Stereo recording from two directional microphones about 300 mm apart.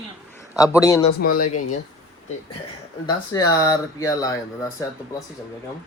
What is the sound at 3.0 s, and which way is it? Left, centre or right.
Speech, centre.